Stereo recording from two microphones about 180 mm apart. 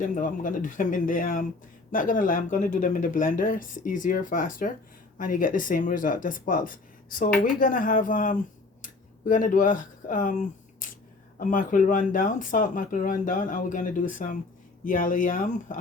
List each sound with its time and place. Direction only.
0.0 s speech: 45° left (ahead or behind)